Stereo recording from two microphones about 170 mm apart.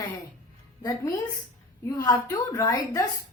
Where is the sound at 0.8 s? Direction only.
20° left (ahead or behind).